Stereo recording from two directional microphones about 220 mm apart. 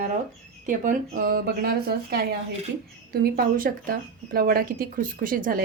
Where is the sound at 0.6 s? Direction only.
35° right (ahead or behind).